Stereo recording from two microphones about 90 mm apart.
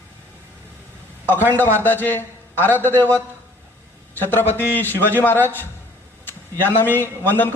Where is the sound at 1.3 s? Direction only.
25° left (ahead or behind).